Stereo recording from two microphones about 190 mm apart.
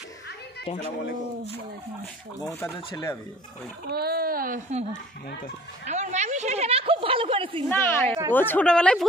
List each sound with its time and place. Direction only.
2.4 s speech: 20° left (ahead or behind)
3.9 s speech: 55° right (ahead or behind)
5.9 s a woman's voice: 35° right (ahead or behind)
7.7 s a woman's voice: 10° left (ahead or behind)